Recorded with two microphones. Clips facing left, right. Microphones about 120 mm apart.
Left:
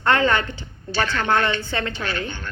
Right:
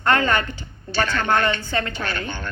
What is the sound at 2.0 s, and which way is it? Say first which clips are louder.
Speech: even; 45° right (ahead or behind).